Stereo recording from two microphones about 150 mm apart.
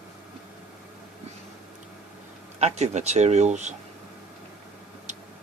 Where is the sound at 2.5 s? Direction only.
45° right (ahead or behind).